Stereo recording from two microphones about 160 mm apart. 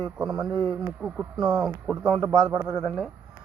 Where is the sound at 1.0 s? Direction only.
5° right (ahead or behind).